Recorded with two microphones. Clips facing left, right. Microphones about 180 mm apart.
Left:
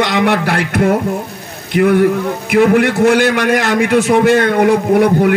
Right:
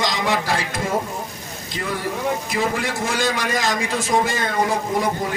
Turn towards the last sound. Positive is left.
turn(degrees=70)  # may be behind; listen again after turning